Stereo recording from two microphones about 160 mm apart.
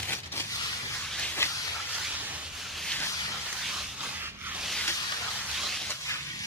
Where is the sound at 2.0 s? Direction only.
10° right (ahead or behind).